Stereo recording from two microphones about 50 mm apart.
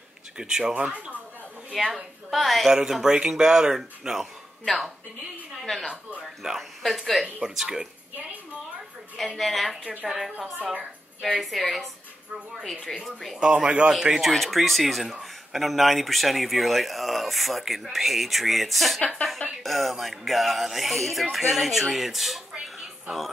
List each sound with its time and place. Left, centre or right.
0.4 s speech: centre
0.7 s speech: right
1.7 s speech: centre
2.7 s speech: centre
6.4 s speech: centre
7.4 s speech: centre
9.1 s speech: centre
10.6 s speech: right
11.3 s speech: centre
13.0 s speech: centre
13.4 s speech: centre
14.2 s speech: centre
22.5 s a sound: centre